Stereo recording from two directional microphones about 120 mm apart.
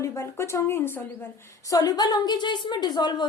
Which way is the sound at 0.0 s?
25° left (ahead or behind).